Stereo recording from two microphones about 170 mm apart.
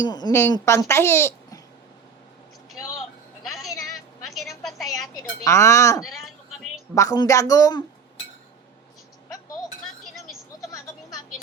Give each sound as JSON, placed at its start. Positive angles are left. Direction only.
{"t": 0.1, "sound": "a child's voice", "side_deg": 20}
{"t": 5.4, "sound": "a child's voice", "side_deg": 15}